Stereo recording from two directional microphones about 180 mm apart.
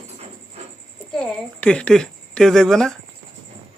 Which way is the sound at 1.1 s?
5° left (ahead or behind).